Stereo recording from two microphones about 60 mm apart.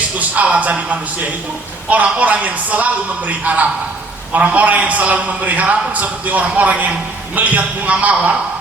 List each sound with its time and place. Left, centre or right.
0.5 s a man's voice: right